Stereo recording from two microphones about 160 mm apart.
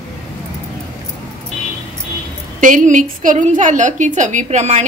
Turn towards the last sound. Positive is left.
turn(degrees=-45)  # may be behind; listen again after turning